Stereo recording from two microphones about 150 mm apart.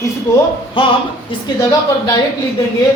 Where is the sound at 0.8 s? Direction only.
35° left (ahead or behind).